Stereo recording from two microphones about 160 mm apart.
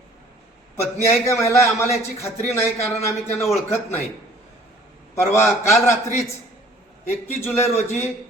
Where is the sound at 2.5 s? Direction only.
40° left (ahead or behind).